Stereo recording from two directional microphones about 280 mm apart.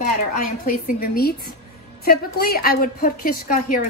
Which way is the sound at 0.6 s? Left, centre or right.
Left.